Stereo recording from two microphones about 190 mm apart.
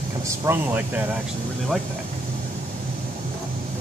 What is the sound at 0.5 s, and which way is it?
Speech, 10° right (ahead or behind).